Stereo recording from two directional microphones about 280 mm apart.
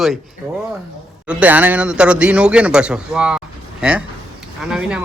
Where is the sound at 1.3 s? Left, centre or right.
Centre.